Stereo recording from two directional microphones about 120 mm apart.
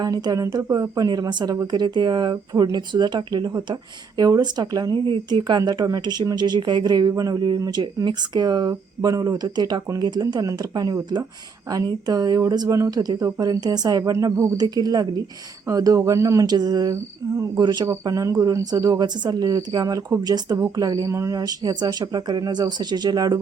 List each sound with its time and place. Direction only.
0.0 s speech: 35° right (ahead or behind)
17.6 s speech: 35° right (ahead or behind)